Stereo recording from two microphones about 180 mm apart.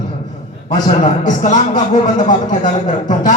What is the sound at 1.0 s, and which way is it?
A man's voice, 45° left (ahead or behind).